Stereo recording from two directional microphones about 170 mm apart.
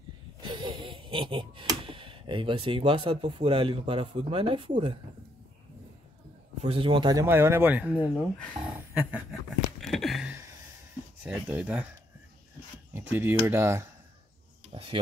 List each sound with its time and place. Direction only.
0.4 s a sound: 25° right (ahead or behind)
6.6 s a man's voice: 30° right (ahead or behind)
7.2 s speech: 15° right (ahead or behind)
8.9 s a sound: 10° right (ahead or behind)
11.2 s speech: 10° right (ahead or behind)
12.9 s speech: 10° right (ahead or behind)
14.7 s speech: 30° right (ahead or behind)